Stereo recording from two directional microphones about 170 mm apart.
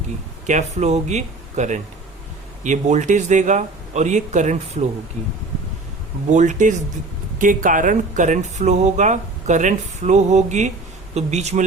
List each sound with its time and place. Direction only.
0.4 s speech: 40° right (ahead or behind)
6.3 s a man's voice: 45° right (ahead or behind)